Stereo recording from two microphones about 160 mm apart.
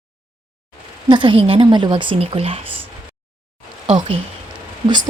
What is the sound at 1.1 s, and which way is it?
A woman's voice, 30° right (ahead or behind).